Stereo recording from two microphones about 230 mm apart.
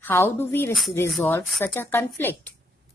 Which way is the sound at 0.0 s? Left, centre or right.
Centre.